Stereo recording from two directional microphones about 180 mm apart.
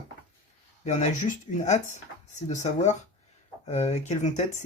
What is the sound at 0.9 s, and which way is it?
Speech, 40° left (ahead or behind).